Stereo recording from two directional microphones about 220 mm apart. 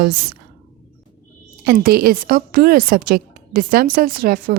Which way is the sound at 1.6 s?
40° right (ahead or behind).